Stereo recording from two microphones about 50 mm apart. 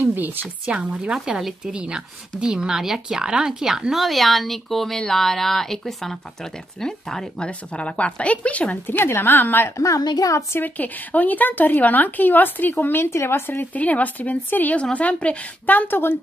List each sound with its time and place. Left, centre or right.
0.0 s speech: right
0.7 s a woman's voice: right
1.1 s speech: centre; by 8.7 s left
9.0 s a woman's voice: left
9.8 s a woman's voice: left
10.6 s speech: left
13.7 s a woman's voice: left